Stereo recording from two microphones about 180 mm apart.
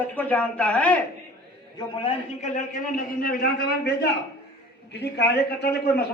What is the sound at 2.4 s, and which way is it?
A man's voice, 50° left (ahead or behind).